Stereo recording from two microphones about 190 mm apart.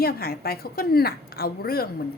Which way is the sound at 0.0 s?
55° left (ahead or behind).